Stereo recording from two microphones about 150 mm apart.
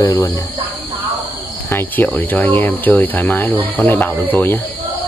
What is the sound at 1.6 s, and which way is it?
Speech, 15° left (ahead or behind).